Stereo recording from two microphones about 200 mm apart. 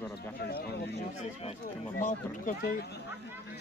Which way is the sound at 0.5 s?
50° left (ahead or behind).